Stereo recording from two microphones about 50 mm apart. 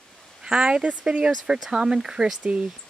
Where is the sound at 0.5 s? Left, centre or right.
Centre.